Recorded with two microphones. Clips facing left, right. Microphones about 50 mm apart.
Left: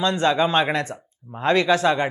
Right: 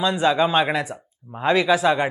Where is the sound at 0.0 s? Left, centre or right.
Centre.